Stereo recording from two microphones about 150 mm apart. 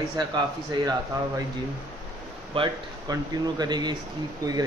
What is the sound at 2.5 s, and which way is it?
Speech, 40° right (ahead or behind).